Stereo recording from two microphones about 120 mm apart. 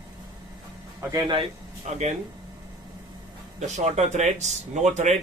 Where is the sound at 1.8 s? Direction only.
70° right (ahead or behind).